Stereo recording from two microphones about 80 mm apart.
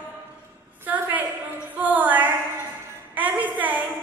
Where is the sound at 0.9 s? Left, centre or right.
Right.